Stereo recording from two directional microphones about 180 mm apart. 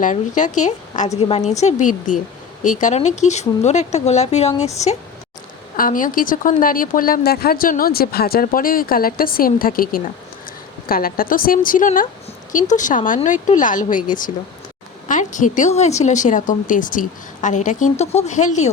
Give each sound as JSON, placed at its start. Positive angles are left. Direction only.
{"t": 0.0, "sound": "speech", "side_deg": 45}
{"t": 5.7, "sound": "speech", "side_deg": 50}